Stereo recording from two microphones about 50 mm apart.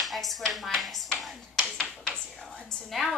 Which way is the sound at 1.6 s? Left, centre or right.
Centre.